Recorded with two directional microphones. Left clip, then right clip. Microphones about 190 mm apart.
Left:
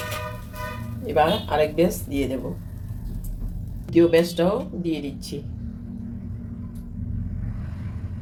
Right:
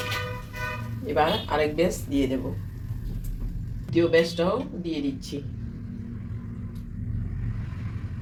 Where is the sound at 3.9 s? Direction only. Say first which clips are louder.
Left 3 dB; 20° left (ahead or behind).